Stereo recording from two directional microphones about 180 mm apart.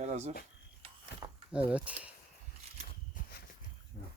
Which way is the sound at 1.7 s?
5° right (ahead or behind).